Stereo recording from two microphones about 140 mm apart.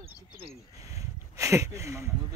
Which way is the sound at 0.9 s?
20° right (ahead or behind).